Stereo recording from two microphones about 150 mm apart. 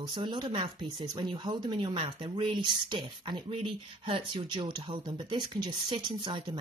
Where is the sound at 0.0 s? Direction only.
30° right (ahead or behind).